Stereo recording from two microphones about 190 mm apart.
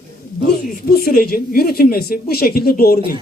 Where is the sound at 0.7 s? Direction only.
50° left (ahead or behind).